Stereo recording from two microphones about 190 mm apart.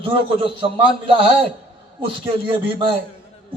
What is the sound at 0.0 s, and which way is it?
A man's voice, 30° right (ahead or behind).